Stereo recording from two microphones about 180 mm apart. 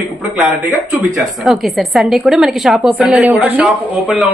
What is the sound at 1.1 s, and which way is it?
A man's voice, centre (ahead or behind).